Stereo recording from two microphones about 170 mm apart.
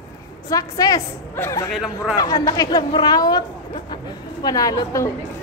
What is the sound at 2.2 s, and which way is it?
A woman's voice, 20° left (ahead or behind).